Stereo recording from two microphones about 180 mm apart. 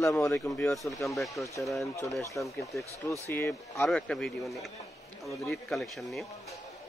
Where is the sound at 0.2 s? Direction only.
15° left (ahead or behind).